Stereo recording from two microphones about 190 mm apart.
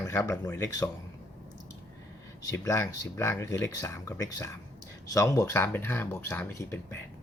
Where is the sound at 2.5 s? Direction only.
15° left (ahead or behind).